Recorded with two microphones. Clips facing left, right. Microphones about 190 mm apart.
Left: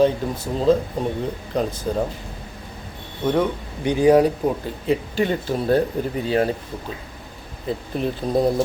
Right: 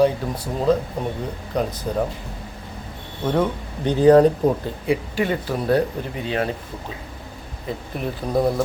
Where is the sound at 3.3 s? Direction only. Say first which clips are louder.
Right 1 dB; 10° left (ahead or behind).